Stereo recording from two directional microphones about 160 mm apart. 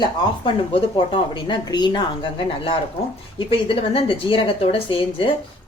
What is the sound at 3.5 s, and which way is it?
A woman's voice, 35° left (ahead or behind).